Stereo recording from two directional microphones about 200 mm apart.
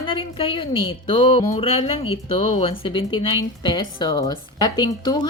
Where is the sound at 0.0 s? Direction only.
25° left (ahead or behind).